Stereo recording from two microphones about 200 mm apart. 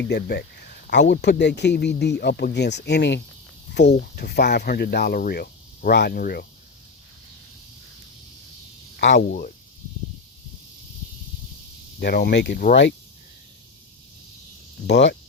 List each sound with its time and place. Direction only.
0.0 s speech: 55° left (ahead or behind)
9.0 s speech: 65° left (ahead or behind)
9.2 s speech: 45° left (ahead or behind)
11.9 s speech: 55° left (ahead or behind)
14.8 s speech: 60° left (ahead or behind)